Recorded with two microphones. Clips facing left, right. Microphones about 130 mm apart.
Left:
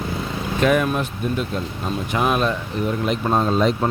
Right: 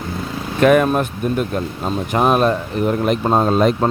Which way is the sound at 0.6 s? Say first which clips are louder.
Right 6 dB; 55° right (ahead or behind).